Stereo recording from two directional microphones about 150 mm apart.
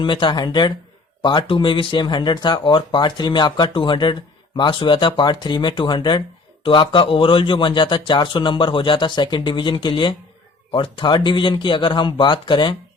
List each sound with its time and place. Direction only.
0.0 s speech: 30° left (ahead or behind)